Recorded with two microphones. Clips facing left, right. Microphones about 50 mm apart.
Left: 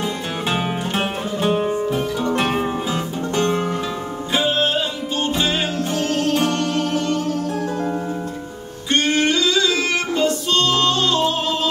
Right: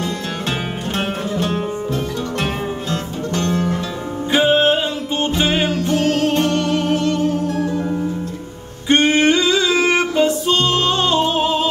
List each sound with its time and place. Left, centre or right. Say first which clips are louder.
0.5 s music: left 3 dB; centre
4.3 s music: right 5 dB; right
8.9 s music: right 4 dB; right